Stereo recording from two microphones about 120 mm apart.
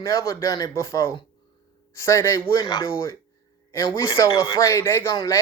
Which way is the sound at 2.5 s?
35° left (ahead or behind).